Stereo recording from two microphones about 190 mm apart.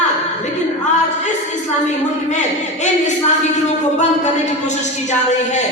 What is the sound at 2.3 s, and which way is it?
A man's voice, 40° left (ahead or behind).